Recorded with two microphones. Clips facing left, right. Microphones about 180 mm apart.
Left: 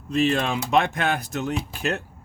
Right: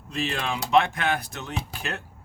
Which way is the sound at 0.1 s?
40° left (ahead or behind).